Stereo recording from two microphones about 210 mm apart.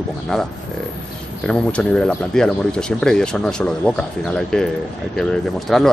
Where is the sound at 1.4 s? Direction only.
5° left (ahead or behind).